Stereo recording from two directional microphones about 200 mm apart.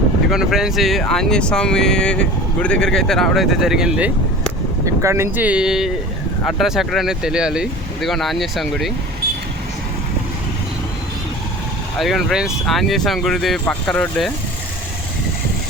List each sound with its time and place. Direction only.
0.3 s speech: centre (ahead or behind)
11.9 s speech: centre (ahead or behind)